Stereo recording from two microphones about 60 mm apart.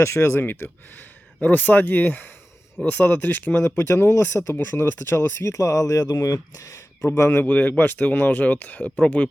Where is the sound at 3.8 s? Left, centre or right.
Left.